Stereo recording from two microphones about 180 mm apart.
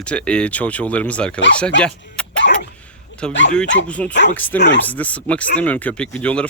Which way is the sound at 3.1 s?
90° left.